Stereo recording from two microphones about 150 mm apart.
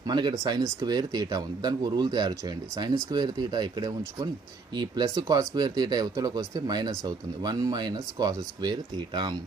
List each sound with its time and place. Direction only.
0.0 s speech: 30° right (ahead or behind)